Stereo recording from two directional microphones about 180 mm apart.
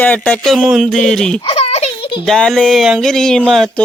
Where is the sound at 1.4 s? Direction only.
35° left (ahead or behind).